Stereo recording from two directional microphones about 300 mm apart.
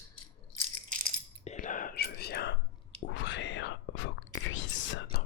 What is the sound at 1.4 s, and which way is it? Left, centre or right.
Whispering, left.